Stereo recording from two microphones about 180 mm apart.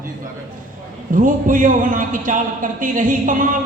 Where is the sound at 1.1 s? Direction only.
50° right (ahead or behind).